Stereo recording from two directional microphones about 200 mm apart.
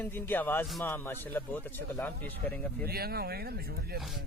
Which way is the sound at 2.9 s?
50° right (ahead or behind).